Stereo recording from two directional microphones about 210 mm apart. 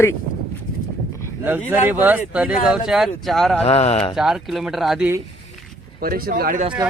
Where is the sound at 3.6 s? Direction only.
30° left (ahead or behind).